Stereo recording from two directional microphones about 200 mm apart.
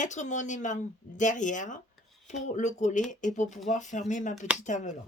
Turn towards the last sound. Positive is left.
turn(degrees=40)  # may be behind; listen again after turning